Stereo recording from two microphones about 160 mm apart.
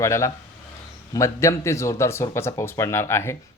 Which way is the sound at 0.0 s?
20° left (ahead or behind).